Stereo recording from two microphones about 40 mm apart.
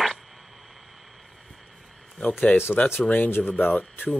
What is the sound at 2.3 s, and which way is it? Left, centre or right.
Speech, left.